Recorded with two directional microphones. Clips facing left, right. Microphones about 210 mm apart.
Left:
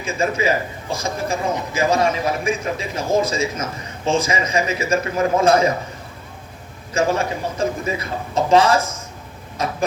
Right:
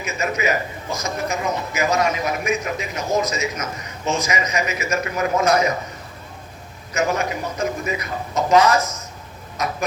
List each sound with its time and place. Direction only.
0.0 s a man's voice: 30° left (ahead or behind)
6.9 s a man's voice: 30° left (ahead or behind)